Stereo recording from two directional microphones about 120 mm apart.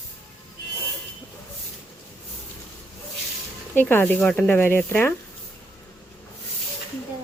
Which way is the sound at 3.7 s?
15° left (ahead or behind).